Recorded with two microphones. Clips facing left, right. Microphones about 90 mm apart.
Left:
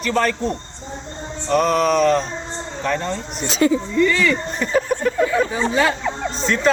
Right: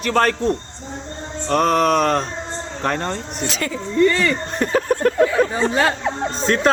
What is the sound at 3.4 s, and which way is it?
Speech, 20° left (ahead or behind).